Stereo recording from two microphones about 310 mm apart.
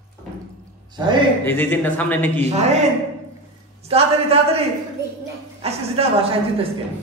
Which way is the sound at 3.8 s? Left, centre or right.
Centre.